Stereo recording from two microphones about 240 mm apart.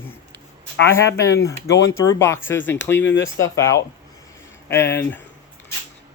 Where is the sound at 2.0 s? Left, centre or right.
Centre.